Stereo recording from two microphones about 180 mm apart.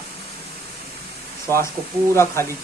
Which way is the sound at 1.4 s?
15° left (ahead or behind).